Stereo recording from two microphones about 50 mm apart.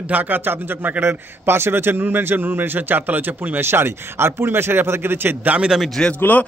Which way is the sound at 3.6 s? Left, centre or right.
Right.